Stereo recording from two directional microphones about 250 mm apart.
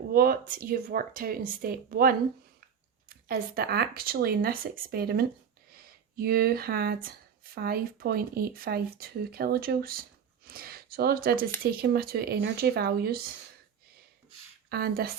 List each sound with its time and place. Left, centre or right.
0.1 s speech: right
14.7 s speech: right